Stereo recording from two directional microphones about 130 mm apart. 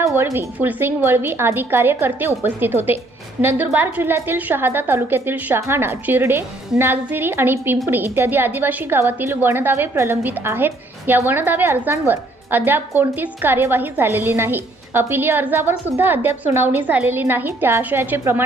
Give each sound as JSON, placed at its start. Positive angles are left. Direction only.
{"t": 0.0, "sound": "a woman's voice", "side_deg": -20}